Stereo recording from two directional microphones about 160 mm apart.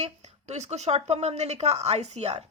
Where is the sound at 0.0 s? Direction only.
45° right (ahead or behind).